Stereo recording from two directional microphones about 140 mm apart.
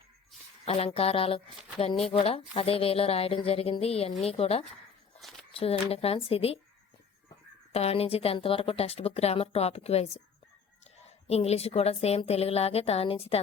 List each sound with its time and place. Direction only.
0.6 s a woman's voice: 45° left (ahead or behind)
7.7 s a woman's voice: 45° left (ahead or behind)